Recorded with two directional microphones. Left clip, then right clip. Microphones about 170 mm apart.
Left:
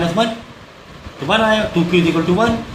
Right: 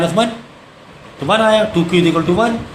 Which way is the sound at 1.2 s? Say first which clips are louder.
Right 3 dB; 45° right (ahead or behind).